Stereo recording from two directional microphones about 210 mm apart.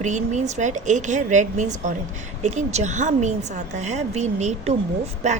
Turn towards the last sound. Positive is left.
turn(degrees=-30)  # may be behind; listen again after turning